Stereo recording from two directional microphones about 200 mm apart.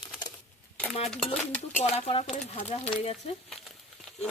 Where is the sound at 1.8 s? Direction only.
30° left (ahead or behind).